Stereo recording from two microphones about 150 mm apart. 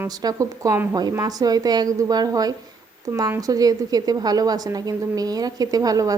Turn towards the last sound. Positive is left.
turn(degrees=-25)  # may be behind; listen again after turning